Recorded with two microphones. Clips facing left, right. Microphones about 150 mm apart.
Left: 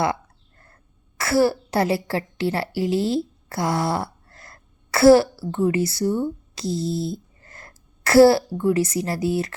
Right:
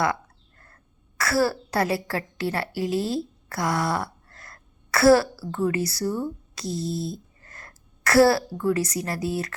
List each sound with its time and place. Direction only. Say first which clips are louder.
1.2 s a woman's voice: left 4 dB; 25° left (ahead or behind)